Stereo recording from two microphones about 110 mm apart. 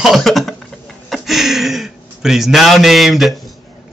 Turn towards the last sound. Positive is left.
turn(degrees=0)  # may be behind; listen again after turning